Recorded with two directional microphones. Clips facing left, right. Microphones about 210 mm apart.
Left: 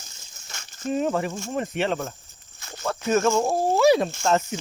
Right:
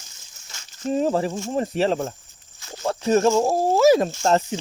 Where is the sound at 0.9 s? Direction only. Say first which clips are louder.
Right 3 dB; 35° right (ahead or behind).